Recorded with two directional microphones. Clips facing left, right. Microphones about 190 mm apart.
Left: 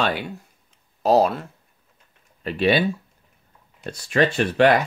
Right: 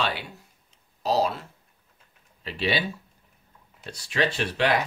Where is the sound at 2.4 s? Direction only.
50° left (ahead or behind).